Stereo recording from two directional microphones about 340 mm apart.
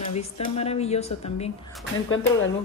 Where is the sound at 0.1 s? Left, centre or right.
Centre.